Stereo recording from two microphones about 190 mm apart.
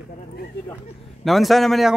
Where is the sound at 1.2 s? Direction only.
Centre (ahead or behind).